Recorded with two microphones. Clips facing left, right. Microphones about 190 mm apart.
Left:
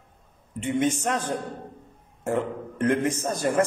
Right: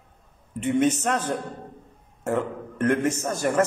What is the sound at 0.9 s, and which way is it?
Speech, 15° left (ahead or behind).